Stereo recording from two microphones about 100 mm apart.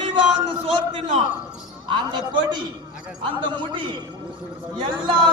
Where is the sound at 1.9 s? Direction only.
50° right (ahead or behind).